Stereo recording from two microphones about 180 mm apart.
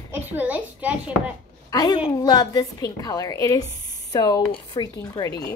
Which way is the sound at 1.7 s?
20° left (ahead or behind).